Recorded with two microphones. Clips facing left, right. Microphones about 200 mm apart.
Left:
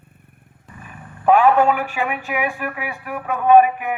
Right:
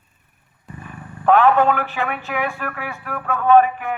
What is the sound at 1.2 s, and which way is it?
A man's voice, 10° left (ahead or behind).